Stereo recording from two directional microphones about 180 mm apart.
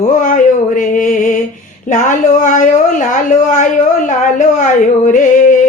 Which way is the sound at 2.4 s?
45° left (ahead or behind).